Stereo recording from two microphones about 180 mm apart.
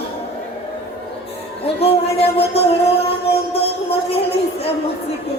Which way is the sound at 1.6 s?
35° left (ahead or behind).